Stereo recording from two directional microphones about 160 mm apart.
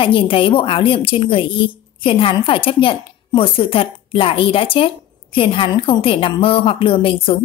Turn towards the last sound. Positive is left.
turn(degrees=35)  # may be behind; listen again after turning